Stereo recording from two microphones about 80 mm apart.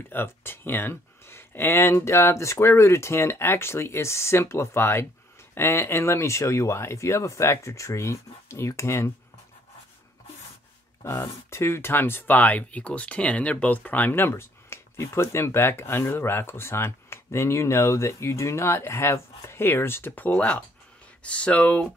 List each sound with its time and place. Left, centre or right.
0.1 s speech: left
11.1 s speech: left; by 21.8 s centre